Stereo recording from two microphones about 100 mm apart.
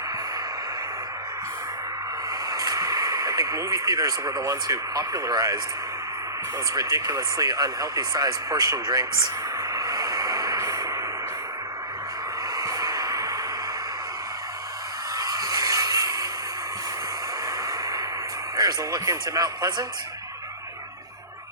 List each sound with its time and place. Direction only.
2.5 s speech: 35° right (ahead or behind)
6.7 s speech: 35° right (ahead or behind)
9.7 s vehicle: 35° right (ahead or behind)
12.5 s music: 35° right (ahead or behind)
15.2 s a sound: 35° right (ahead or behind)
17.7 s a sound: 35° right (ahead or behind)
18.5 s speech: 35° right (ahead or behind)